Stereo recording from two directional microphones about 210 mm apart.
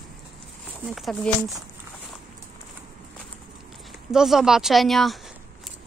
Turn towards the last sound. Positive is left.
turn(degrees=0)  # may be behind; listen again after turning